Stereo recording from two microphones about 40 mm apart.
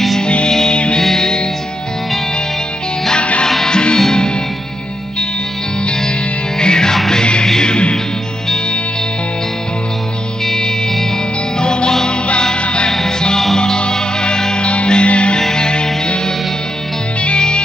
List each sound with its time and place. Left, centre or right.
0.2 s music: left
0.5 s music: centre
0.7 s music: left
3.2 s music: left
3.4 s music: centre
6.6 s music: centre
10.4 s music: centre
12.9 s music: centre
15.3 s music: centre